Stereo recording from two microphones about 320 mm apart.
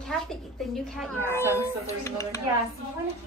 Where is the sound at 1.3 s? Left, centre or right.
Centre.